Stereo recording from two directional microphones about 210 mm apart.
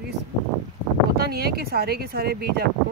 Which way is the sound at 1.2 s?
50° right (ahead or behind).